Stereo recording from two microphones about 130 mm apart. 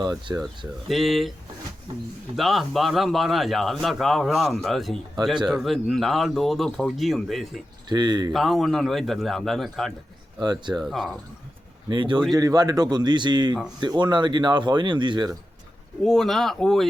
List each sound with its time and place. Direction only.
0.0 s speech: 30° right (ahead or behind)
0.9 s a man's voice: centre (ahead or behind)
2.3 s a man's voice: centre (ahead or behind)
7.9 s speech: 35° right (ahead or behind)
8.3 s a man's voice: centre (ahead or behind)
10.4 s speech: 30° right (ahead or behind)
10.8 s a man's voice: centre (ahead or behind)
11.9 s speech: 35° right (ahead or behind)
16.0 s a man's voice: centre (ahead or behind)